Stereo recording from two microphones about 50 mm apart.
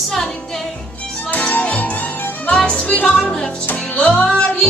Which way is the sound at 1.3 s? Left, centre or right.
Left.